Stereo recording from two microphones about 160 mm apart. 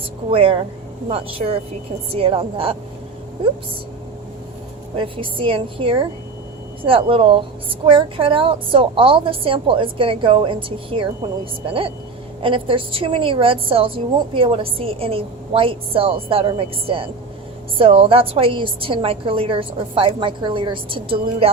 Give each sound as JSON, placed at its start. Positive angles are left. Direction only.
{"t": 0.3, "sound": "a woman's voice", "side_deg": -35}
{"t": 2.1, "sound": "a woman's voice", "side_deg": -35}
{"t": 4.9, "sound": "a woman's voice", "side_deg": -30}